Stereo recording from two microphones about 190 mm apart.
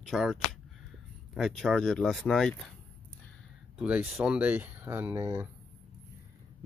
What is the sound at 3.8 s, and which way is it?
Speech, 5° right (ahead or behind).